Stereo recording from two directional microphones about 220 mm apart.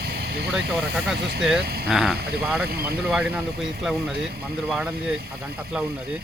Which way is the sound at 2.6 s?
45° right (ahead or behind).